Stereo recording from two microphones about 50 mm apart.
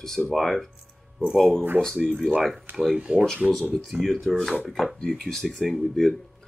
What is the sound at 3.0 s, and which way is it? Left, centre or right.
Speech, right.